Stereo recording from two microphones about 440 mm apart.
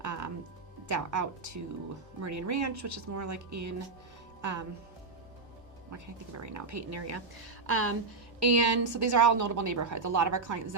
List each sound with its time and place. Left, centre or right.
0.0 s music: right
0.9 s a woman's voice: right
4.4 s music: right
5.9 s a woman's voice: right